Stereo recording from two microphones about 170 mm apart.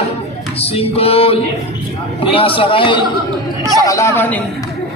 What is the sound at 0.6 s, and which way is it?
Music, 35° left (ahead or behind).